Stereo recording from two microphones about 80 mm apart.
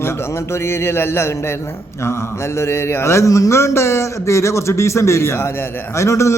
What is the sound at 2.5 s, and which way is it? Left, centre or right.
A man's voice, left.